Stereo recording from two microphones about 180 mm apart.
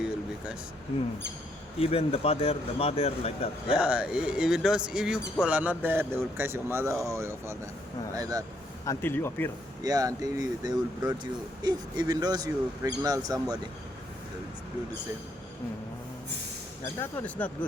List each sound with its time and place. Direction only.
1.8 s speech: 30° left (ahead or behind)
3.8 s speech: 5° right (ahead or behind)
8.8 s speech: 15° left (ahead or behind)
9.8 s speech: 20° right (ahead or behind)
16.8 s speech: 10° left (ahead or behind)